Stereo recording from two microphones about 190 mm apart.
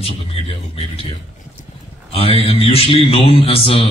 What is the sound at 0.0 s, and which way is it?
Speech, 30° left (ahead or behind).